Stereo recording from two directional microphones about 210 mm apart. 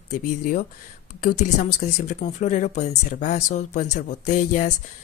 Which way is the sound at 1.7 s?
35° left (ahead or behind).